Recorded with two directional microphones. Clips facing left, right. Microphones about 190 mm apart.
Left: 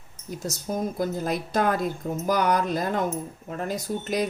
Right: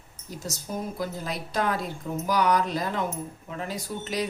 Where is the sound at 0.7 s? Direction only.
50° left (ahead or behind).